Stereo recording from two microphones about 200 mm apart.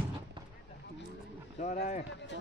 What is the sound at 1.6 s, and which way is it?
Speech, 35° left (ahead or behind).